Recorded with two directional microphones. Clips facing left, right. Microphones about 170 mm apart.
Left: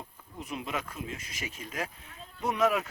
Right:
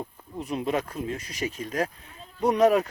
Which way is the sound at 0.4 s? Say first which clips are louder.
Right 8 dB; 35° right (ahead or behind).